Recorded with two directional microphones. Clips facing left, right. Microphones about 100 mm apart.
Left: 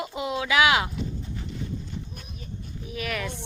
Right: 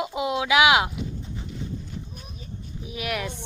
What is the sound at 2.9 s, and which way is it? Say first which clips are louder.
Speech: right 1 dB; 10° right (ahead or behind).